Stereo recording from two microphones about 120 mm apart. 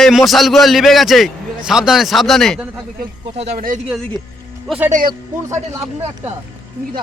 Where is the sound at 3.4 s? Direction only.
70° right (ahead or behind).